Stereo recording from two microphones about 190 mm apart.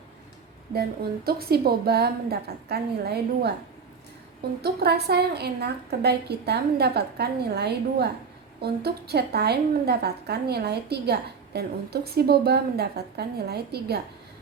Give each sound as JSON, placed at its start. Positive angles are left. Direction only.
{"t": 0.7, "sound": "a woman's voice", "side_deg": -55}
{"t": 4.6, "sound": "a woman's voice", "side_deg": -55}